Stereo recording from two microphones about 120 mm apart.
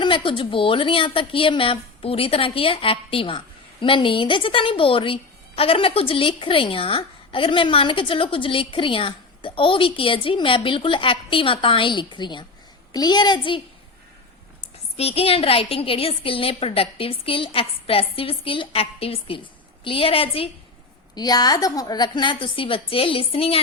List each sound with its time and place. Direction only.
0.0 s a woman's voice: 45° left (ahead or behind)
14.9 s a woman's voice: 55° left (ahead or behind)
21.2 s a woman's voice: 35° left (ahead or behind); by 23.6 s 50° left (ahead or behind)